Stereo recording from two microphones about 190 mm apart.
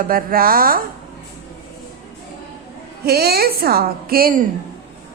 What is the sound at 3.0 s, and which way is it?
A woman's voice, 55° right (ahead or behind).